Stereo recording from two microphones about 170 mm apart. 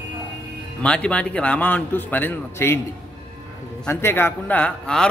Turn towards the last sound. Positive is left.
turn(degrees=5)  # may be behind; listen again after turning